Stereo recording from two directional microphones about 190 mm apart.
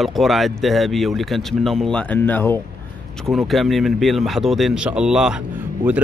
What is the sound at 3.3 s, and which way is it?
Speech, centre (ahead or behind).